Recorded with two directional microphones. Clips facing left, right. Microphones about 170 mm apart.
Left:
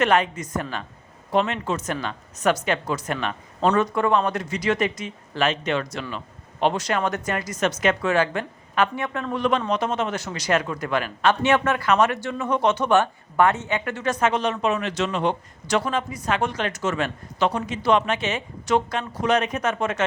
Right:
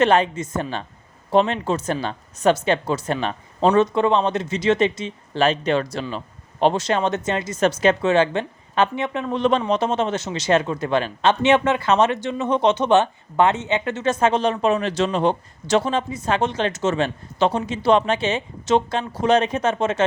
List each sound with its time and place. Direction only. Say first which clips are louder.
0.0 s speech: right 3 dB; 30° right (ahead or behind)